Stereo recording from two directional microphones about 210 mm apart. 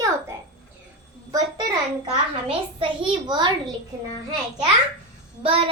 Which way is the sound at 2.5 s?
25° right (ahead or behind).